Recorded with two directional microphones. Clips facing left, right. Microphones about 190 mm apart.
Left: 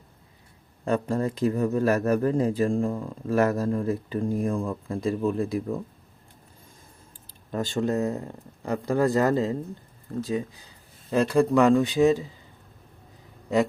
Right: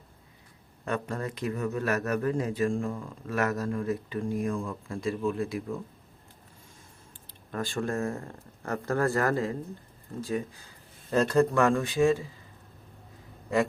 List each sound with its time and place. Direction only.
0.9 s speech: 30° left (ahead or behind)
7.5 s speech: 25° left (ahead or behind)